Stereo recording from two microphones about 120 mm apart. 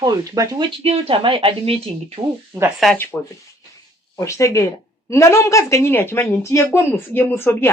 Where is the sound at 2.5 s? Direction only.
25° right (ahead or behind).